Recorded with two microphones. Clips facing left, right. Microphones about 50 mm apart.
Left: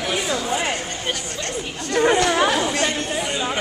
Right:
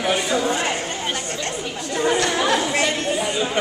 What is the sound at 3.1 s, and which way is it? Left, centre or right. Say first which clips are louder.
Chatter: right 3 dB; centre.